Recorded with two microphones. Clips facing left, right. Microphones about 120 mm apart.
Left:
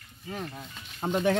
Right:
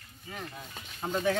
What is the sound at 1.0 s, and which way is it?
Speech, 25° left (ahead or behind).